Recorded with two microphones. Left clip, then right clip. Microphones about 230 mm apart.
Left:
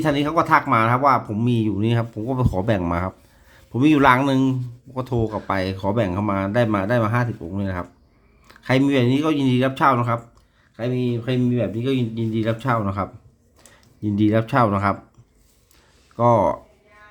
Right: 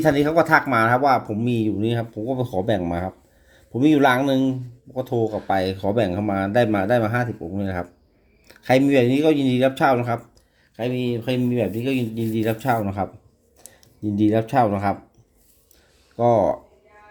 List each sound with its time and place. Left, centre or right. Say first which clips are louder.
0.0 s speech: right 2 dB; centre
10.8 s speech: even; centre
16.1 s speech: left 1 dB; centre